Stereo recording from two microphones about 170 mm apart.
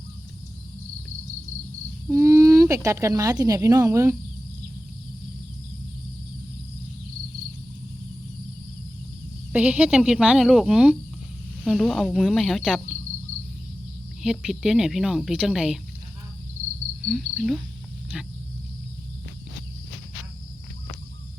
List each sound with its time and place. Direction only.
2.0 s speech: 15° right (ahead or behind)
9.5 s speech: 5° right (ahead or behind)
14.2 s speech: 5° right (ahead or behind)
17.0 s speech: centre (ahead or behind)